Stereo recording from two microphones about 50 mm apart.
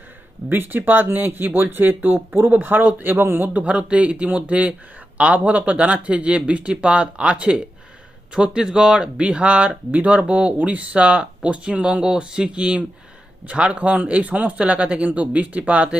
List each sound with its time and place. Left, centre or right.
0.4 s a man's voice: right
3.5 s speech: right